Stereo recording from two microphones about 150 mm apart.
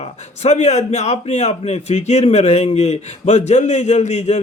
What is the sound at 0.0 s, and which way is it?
A man's voice, 45° left (ahead or behind).